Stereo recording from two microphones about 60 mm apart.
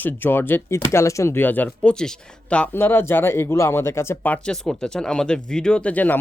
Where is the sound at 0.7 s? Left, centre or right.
Left.